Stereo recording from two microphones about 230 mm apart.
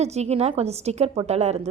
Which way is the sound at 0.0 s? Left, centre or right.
Right.